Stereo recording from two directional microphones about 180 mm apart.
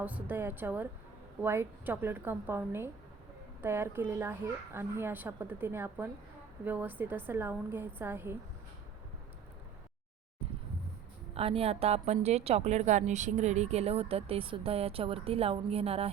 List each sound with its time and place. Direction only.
0.0 s a child's voice: 10° right (ahead or behind)
11.3 s a woman's voice: 30° right (ahead or behind)